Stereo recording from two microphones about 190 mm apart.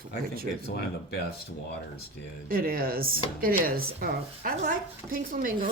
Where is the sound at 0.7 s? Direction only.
55° left (ahead or behind).